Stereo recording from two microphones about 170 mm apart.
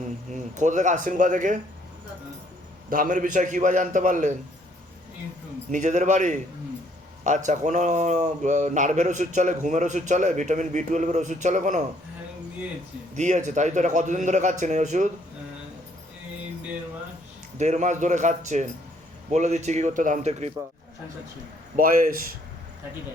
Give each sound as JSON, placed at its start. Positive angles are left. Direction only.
{"t": 0.3, "sound": "a man's voice", "side_deg": -45}
{"t": 2.9, "sound": "a man's voice", "side_deg": -55}
{"t": 5.7, "sound": "a man's voice", "side_deg": -45}
{"t": 13.1, "sound": "a man's voice", "side_deg": -45}
{"t": 17.6, "sound": "a man's voice", "side_deg": -45}
{"t": 21.8, "sound": "speech", "side_deg": -55}